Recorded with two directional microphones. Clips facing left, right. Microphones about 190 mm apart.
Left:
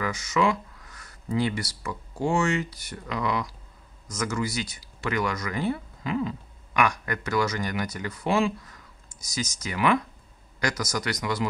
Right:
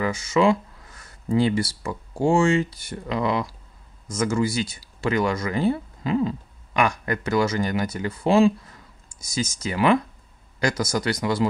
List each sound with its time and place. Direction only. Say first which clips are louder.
0.0 s speech: right 5 dB; 30° right (ahead or behind)